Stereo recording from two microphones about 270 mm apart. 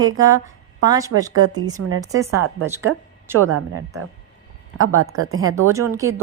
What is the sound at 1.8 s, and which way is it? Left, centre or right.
Speech, right.